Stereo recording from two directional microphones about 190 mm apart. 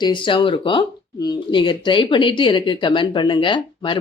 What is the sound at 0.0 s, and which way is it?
Speech, 25° left (ahead or behind).